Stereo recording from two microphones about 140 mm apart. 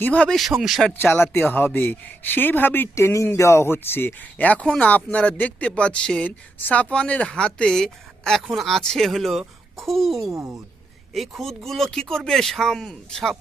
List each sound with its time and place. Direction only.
0.0 s speech: 10° left (ahead or behind)
0.9 s speech: 15° left (ahead or behind)
10.2 s speech: 20° right (ahead or behind)
11.1 s speech: centre (ahead or behind)